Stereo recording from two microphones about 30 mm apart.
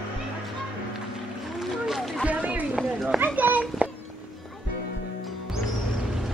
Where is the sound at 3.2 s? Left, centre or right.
Right.